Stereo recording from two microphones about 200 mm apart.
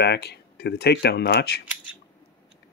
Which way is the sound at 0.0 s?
55° left (ahead or behind).